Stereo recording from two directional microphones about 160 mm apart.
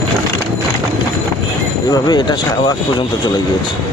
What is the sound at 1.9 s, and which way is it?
Speech, 25° left (ahead or behind).